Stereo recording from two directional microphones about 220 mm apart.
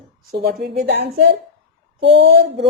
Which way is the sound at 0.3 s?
45° right (ahead or behind).